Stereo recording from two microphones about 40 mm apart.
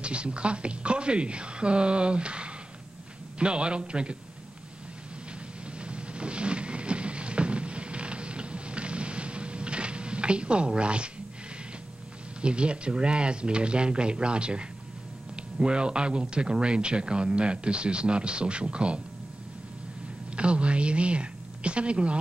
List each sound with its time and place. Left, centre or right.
0.0 s speech: right
5.9 s a sound: right
12.4 s speech: right
20.3 s a woman's voice: right